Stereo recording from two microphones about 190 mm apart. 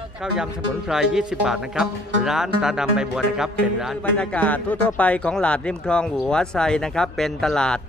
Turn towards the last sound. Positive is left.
turn(degrees=5)  # may be behind; listen again after turning